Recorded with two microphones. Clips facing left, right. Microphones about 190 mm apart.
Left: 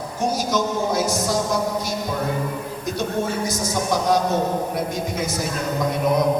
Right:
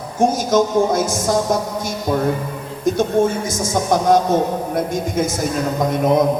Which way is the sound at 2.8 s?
50° right (ahead or behind).